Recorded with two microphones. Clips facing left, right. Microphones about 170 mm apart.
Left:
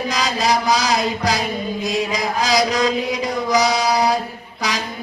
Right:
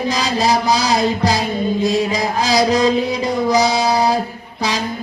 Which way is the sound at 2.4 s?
30° right (ahead or behind).